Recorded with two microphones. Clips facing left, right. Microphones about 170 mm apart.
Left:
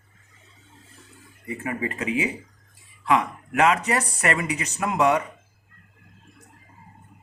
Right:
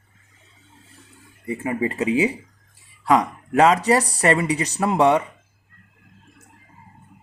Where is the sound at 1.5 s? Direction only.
25° right (ahead or behind).